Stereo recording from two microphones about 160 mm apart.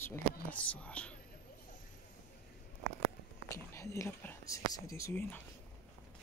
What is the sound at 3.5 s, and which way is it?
Speech, 20° left (ahead or behind).